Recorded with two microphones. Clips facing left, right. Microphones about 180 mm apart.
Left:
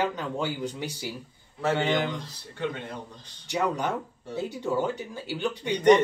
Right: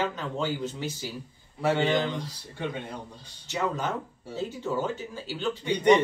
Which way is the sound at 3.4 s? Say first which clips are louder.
Left 2 dB; 15° left (ahead or behind).